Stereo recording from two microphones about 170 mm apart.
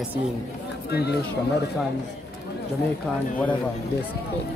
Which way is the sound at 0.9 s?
75° left (ahead or behind).